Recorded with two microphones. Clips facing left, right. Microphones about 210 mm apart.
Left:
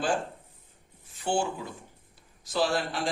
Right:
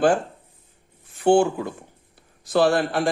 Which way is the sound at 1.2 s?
60° right (ahead or behind).